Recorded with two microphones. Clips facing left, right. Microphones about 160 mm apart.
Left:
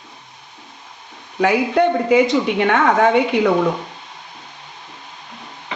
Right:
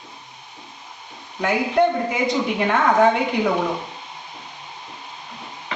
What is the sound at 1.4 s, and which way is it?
A woman's voice, 80° left.